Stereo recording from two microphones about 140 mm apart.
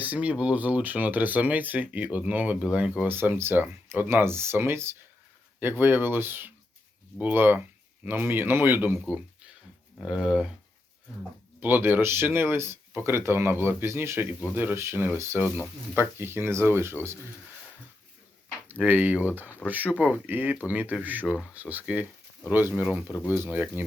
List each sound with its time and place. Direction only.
0.0 s speech: 10° right (ahead or behind)
11.6 s speech: 15° right (ahead or behind)
18.7 s speech: 15° right (ahead or behind)